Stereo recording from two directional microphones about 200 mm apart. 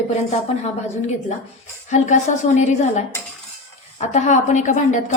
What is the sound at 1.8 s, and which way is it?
A woman's voice, 35° left (ahead or behind).